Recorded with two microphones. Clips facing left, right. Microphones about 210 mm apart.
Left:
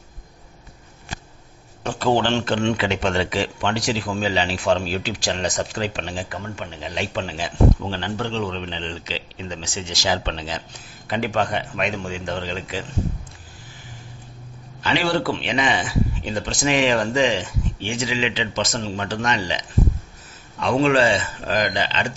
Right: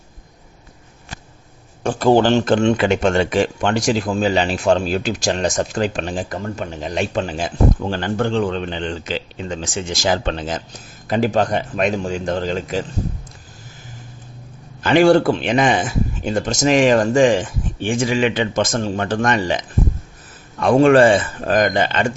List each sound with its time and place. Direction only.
1.8 s speech: 45° right (ahead or behind)
14.8 s speech: 50° right (ahead or behind)